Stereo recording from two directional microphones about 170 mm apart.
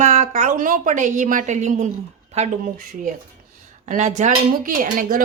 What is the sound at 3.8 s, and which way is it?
Speech, 45° right (ahead or behind).